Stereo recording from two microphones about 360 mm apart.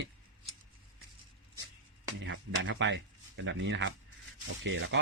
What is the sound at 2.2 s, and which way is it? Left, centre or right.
Speech, right.